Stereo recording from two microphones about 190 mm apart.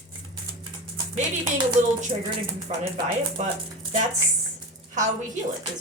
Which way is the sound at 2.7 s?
35° right (ahead or behind).